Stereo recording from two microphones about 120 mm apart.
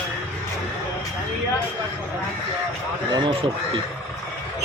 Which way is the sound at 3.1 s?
45° right (ahead or behind).